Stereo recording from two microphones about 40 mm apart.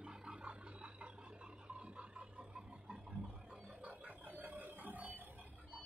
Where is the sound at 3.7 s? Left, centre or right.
Right.